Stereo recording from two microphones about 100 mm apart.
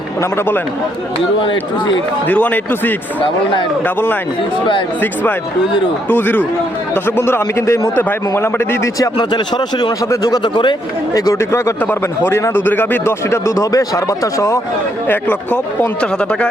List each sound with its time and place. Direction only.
0.2 s speech: 25° left (ahead or behind)
1.4 s speech: 55° left (ahead or behind)
2.2 s speech: 15° left (ahead or behind)
6.1 s speech: 20° left (ahead or behind)
9.1 s speech: 50° left (ahead or behind)
10.0 s speech: 35° left (ahead or behind)
10.5 s speech: 50° left (ahead or behind)
11.1 s speech: 30° left (ahead or behind)
11.8 s speech: 20° left (ahead or behind)
15.0 s speech: 20° left (ahead or behind)